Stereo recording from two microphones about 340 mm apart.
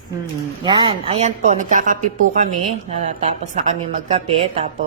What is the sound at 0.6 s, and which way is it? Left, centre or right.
Speech, centre.